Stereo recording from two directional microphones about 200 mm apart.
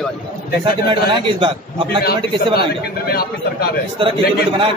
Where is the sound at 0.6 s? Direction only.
25° right (ahead or behind).